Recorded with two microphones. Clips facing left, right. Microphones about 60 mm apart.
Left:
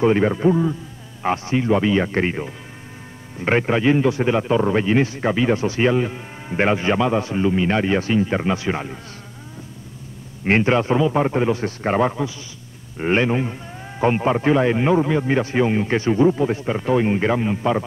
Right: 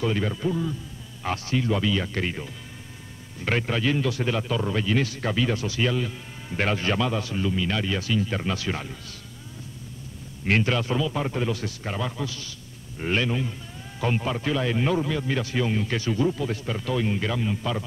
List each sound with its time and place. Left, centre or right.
0.0 s a man's voice: left
10.4 s a man's voice: left